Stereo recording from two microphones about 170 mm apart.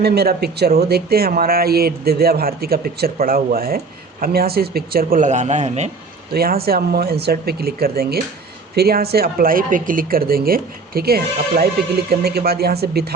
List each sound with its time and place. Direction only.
0.0 s speech: 70° right (ahead or behind); by 5.9 s 40° right (ahead or behind)
6.3 s speech: 65° right (ahead or behind)